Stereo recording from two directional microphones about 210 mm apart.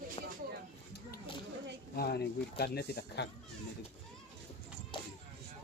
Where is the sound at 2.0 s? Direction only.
50° left (ahead or behind).